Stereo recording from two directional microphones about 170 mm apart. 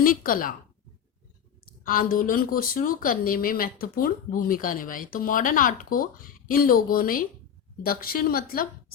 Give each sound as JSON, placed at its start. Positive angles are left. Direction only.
{"t": 0.0, "sound": "speech", "side_deg": 55}
{"t": 1.6, "sound": "speech", "side_deg": 55}